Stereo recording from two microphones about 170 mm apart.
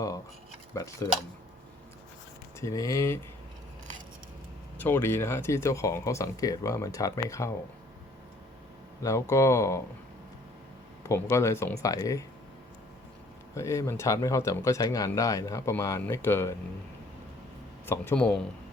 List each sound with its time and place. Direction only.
0.7 s cutlery: 20° left (ahead or behind)
2.6 s speech: 20° left (ahead or behind)
4.8 s speech: 10° left (ahead or behind)
9.0 s speech: 15° left (ahead or behind)
11.1 s speech: 15° left (ahead or behind)
13.6 s speech: 15° left (ahead or behind)
17.8 s speech: 15° left (ahead or behind)